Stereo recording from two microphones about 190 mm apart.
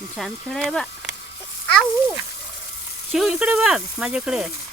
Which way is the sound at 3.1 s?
Centre (ahead or behind).